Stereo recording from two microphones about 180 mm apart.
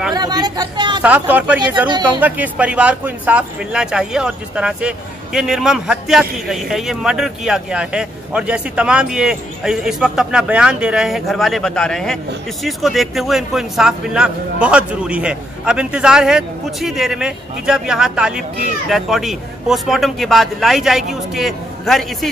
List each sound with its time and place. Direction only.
0.1 s speech: 20° right (ahead or behind)
1.0 s speech: 10° right (ahead or behind)